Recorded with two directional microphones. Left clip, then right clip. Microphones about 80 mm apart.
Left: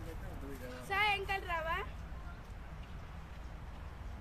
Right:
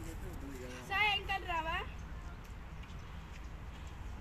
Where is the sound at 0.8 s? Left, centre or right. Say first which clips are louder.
Even; left.